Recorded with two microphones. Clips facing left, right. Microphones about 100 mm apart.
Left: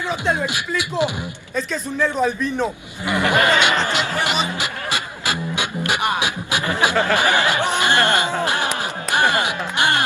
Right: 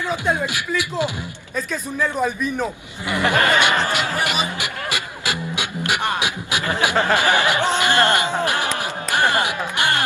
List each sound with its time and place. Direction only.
0.5 s speech: 20° left (ahead or behind)
1.5 s a man's voice: 5° right (ahead or behind)
3.1 s speech: 20° left (ahead or behind)
5.9 s beatboxing: 20° left (ahead or behind)
6.9 s speech: 20° right (ahead or behind)
7.8 s music: 20° left (ahead or behind)